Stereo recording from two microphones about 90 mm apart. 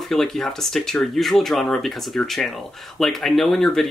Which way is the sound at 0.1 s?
5° left (ahead or behind).